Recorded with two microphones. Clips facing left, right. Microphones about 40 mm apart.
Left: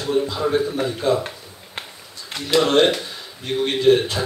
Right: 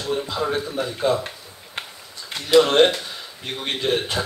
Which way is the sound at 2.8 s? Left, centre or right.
Centre.